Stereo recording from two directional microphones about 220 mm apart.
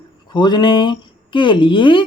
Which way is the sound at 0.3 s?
20° left (ahead or behind).